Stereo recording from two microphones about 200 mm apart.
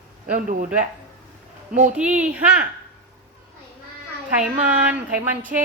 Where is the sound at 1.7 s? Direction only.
40° right (ahead or behind).